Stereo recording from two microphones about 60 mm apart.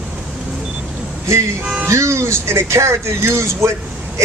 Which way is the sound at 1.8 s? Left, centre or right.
Right.